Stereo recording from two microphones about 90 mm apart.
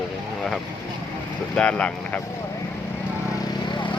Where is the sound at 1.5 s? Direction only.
15° left (ahead or behind).